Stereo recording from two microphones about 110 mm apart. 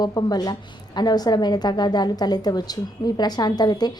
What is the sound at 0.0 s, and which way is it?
A woman's voice, 35° left (ahead or behind).